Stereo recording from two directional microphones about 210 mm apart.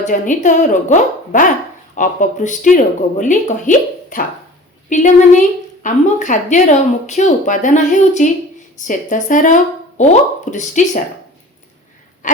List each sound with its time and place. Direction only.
0.0 s a woman's voice: 35° left (ahead or behind)
12.2 s wheeze: 35° left (ahead or behind)